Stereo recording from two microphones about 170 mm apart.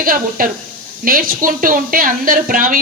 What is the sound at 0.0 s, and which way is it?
A woman's voice, 55° right (ahead or behind).